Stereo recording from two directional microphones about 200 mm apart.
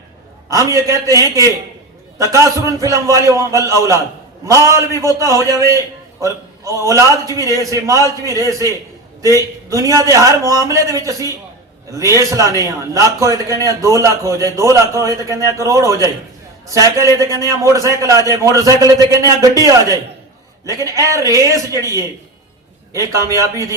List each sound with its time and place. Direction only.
0.7 s a man's voice: 15° right (ahead or behind)